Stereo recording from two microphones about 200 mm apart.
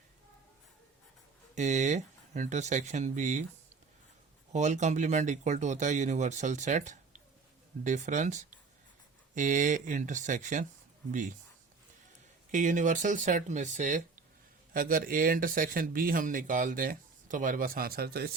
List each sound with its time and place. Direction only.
1.5 s speech: 35° right (ahead or behind)
4.5 s speech: 35° right (ahead or behind)
12.5 s speech: 40° right (ahead or behind)